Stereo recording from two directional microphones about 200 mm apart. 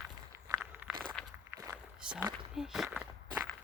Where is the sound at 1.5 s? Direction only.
10° right (ahead or behind).